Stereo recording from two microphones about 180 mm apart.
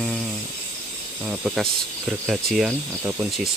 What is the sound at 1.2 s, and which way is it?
Speech, 5° right (ahead or behind).